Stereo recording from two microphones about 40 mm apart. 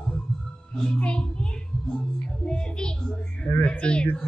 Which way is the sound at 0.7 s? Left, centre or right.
Centre.